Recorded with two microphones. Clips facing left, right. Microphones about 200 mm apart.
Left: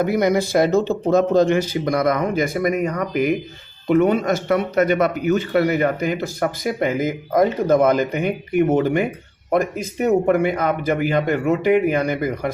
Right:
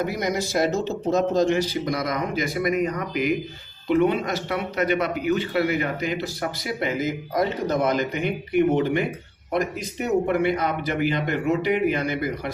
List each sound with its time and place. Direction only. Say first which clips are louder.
0.0 s speech: left 7 dB; 55° left (ahead or behind)
3.8 s a man's voice: left 4 dB; 50° left (ahead or behind)